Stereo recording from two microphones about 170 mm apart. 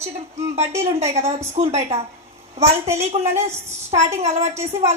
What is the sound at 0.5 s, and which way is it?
A woman's voice, 40° right (ahead or behind).